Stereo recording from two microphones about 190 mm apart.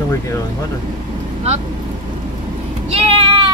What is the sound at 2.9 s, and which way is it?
Sheep, 30° right (ahead or behind).